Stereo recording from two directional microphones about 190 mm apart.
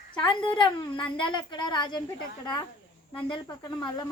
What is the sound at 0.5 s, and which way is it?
Speech, 25° left (ahead or behind).